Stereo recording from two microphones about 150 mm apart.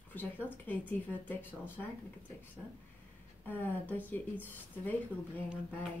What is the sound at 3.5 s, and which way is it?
A woman's voice, 10° left (ahead or behind).